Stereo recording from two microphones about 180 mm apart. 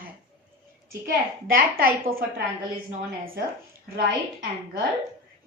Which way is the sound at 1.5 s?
55° right (ahead or behind).